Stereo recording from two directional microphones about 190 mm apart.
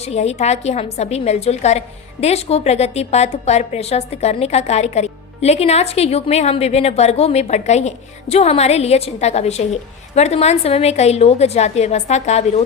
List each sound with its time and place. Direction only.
0.0 s a woman's voice: 35° left (ahead or behind)